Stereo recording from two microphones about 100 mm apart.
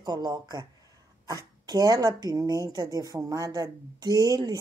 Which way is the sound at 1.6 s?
35° right (ahead or behind).